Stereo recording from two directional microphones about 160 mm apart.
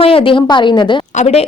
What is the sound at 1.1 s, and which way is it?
Speech, 45° left (ahead or behind).